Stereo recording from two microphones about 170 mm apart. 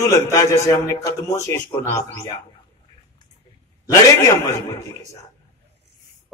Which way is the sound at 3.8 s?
20° left (ahead or behind).